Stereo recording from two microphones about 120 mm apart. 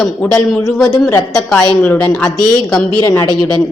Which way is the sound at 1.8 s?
10° left (ahead or behind).